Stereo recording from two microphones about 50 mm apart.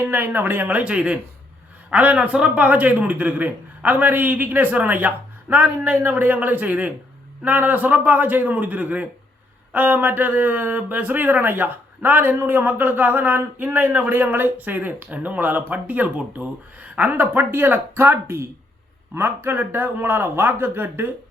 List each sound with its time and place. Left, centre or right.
0.0 s a man's voice: right
19.1 s a man's voice: right